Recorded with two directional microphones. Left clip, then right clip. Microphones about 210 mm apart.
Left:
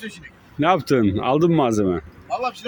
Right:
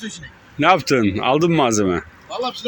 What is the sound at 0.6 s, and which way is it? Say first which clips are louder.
Speech: right 3 dB; 20° left (ahead or behind).